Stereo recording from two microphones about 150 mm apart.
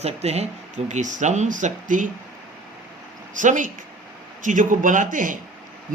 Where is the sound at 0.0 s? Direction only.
45° right (ahead or behind).